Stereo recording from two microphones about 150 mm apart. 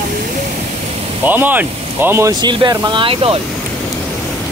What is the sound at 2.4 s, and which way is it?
Speech, 30° right (ahead or behind).